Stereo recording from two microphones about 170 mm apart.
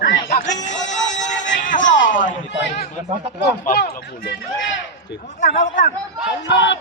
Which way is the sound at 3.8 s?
70° left (ahead or behind).